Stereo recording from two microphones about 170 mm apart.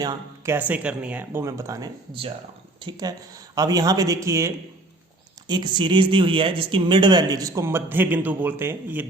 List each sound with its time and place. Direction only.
0.0 s speech: 25° right (ahead or behind)
0.5 s speech: 10° right (ahead or behind)